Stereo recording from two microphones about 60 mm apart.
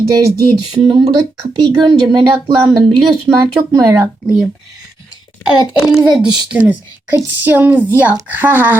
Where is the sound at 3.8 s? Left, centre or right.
Right.